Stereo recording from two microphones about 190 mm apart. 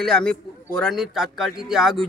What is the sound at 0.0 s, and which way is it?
Speech, 5° left (ahead or behind).